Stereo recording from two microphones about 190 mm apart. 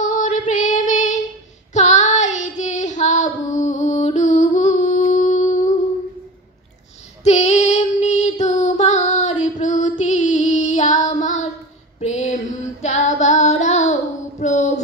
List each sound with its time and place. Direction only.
0.0 s female singing: 45° left (ahead or behind)
1.7 s child singing: 40° left (ahead or behind)
7.2 s music: 35° left (ahead or behind)
11.1 s child singing: 40° left (ahead or behind)
12.0 s a sound: 35° left (ahead or behind)
12.8 s child singing: 35° left (ahead or behind)
14.4 s a sound: 40° left (ahead or behind)